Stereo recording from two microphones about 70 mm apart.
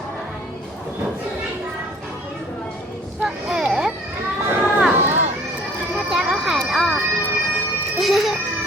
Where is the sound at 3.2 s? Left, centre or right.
Centre.